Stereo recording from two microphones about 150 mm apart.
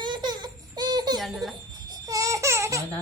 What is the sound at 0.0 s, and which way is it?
Baby laughter, 30° right (ahead or behind).